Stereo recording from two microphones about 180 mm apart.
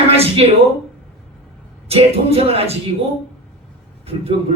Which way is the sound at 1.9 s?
35° right (ahead or behind).